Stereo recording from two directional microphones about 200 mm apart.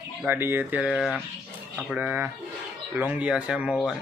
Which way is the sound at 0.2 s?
10° right (ahead or behind).